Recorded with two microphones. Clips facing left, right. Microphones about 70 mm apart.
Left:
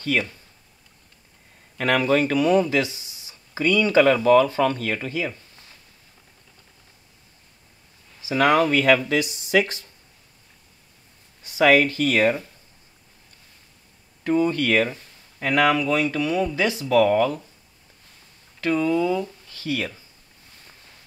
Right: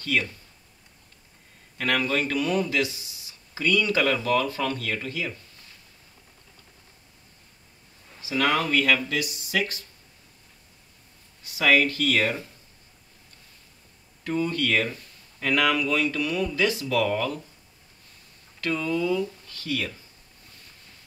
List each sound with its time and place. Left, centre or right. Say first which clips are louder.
0.0 s speech: left 3 dB; left
1.8 s speech: left 5 dB; left
8.3 s speech: left 6 dB; left
11.4 s speech: left 4 dB; left
14.2 s speech: left 5 dB; left
18.6 s speech: left 5 dB; left